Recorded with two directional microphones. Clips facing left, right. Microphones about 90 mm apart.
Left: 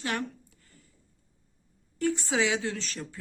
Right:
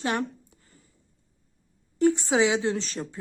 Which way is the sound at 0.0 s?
25° right (ahead or behind).